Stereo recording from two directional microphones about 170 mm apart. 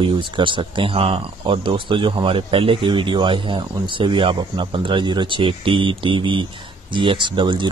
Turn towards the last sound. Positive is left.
turn(degrees=-30)  # may be behind; listen again after turning